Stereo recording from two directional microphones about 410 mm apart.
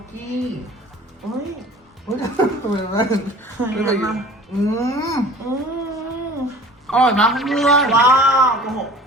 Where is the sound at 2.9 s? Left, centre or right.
Centre.